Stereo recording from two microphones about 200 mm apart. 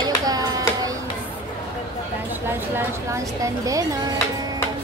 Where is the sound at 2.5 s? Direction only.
15° right (ahead or behind).